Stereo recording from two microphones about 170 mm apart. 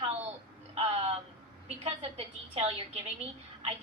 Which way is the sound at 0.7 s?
35° right (ahead or behind).